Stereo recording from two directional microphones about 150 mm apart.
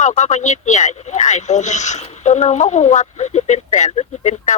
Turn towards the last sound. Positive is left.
turn(degrees=50)  # may be behind; listen again after turning